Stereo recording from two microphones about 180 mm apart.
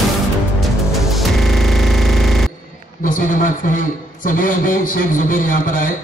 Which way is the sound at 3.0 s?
50° left (ahead or behind).